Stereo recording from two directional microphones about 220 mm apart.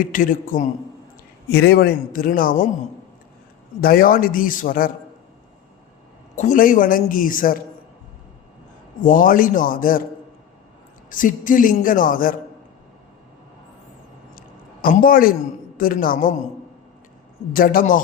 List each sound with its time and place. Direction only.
0.0 s a man's voice: 40° left (ahead or behind)
1.5 s a man's voice: 45° left (ahead or behind)
3.8 s a man's voice: 40° left (ahead or behind)
6.3 s a man's voice: 35° left (ahead or behind)
9.0 s a man's voice: 40° left (ahead or behind)
11.1 s a man's voice: 35° left (ahead or behind)
14.3 s a sound: 40° left (ahead or behind)
15.8 s a man's voice: 40° left (ahead or behind)
17.5 s a man's voice: 40° left (ahead or behind)